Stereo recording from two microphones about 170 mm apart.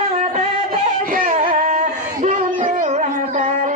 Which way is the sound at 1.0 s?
55° right (ahead or behind).